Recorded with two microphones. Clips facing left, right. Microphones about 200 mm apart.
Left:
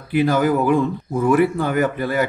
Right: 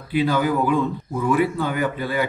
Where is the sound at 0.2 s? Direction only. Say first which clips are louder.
Left 3 dB; 45° left (ahead or behind).